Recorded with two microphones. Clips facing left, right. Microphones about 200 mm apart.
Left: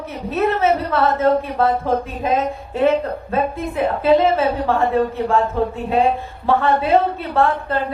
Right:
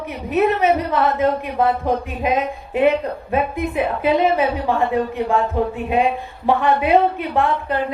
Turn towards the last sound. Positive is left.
turn(degrees=-15)  # may be behind; listen again after turning